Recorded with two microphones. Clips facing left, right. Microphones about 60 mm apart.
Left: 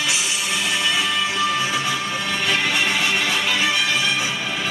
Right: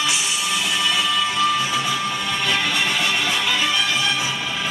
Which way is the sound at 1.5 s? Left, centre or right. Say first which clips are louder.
Even; centre.